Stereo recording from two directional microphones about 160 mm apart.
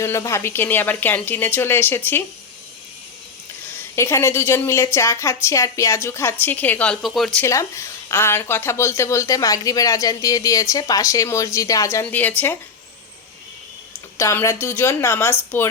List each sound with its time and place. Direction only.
0.0 s speech: 20° left (ahead or behind)
3.9 s speech: 15° left (ahead or behind); by 7.4 s centre (ahead or behind)
7.4 s a woman's voice: 20° left (ahead or behind)
14.2 s speech: 20° left (ahead or behind)